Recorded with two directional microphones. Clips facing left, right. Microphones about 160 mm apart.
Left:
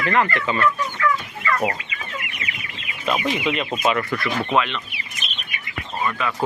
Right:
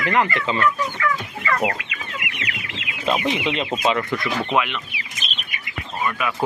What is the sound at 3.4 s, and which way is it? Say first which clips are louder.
Speech: even; 25° right (ahead or behind).